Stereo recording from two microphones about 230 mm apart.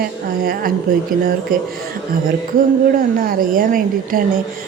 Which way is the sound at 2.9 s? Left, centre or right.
Right.